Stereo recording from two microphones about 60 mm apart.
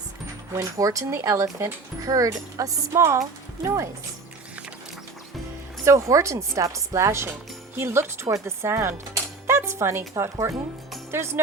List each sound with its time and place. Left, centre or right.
0.5 s speech: right
2.0 s speech: right
5.8 s speech: right
11.1 s speech: right